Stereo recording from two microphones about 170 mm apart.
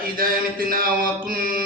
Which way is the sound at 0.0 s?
55° right (ahead or behind).